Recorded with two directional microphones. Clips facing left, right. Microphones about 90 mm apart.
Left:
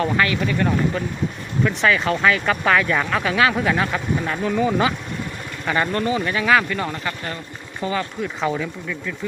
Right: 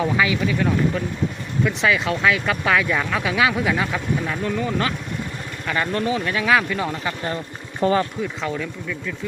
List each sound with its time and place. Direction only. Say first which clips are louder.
0.0 s speech: even; 5° right (ahead or behind)
7.8 s speech: right 5 dB; 40° right (ahead or behind)
8.2 s speech: left 2 dB; 10° left (ahead or behind)